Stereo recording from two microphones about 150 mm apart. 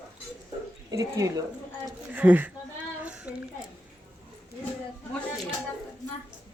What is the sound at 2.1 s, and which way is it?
Speech, 10° right (ahead or behind).